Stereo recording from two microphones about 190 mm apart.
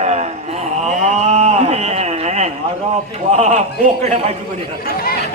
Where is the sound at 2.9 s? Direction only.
35° right (ahead or behind).